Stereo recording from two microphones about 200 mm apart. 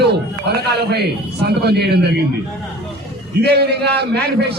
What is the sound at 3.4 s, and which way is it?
Speech, 55° right (ahead or behind).